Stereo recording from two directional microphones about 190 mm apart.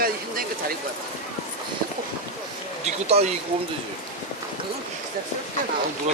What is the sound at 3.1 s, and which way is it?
Speech, 30° right (ahead or behind).